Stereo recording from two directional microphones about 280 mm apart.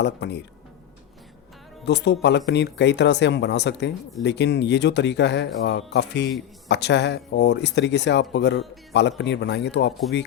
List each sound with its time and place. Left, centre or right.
0.0 s speech: left
1.8 s speech: left